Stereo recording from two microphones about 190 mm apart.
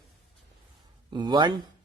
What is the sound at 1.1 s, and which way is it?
Speech, 25° right (ahead or behind).